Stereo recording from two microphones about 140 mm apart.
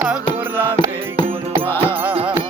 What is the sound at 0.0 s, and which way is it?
Music, 10° right (ahead or behind).